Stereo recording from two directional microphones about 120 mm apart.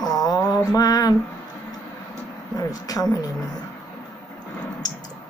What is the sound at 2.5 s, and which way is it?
Speech, 30° left (ahead or behind).